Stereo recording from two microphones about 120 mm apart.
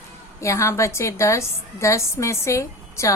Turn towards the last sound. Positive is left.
turn(degrees=25)  # may be behind; listen again after turning